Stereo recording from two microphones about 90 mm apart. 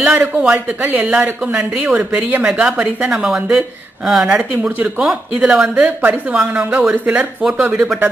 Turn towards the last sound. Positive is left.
turn(degrees=-10)  # may be behind; listen again after turning